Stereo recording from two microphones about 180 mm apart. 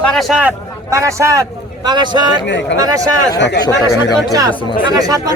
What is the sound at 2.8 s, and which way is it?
Speech, 20° right (ahead or behind).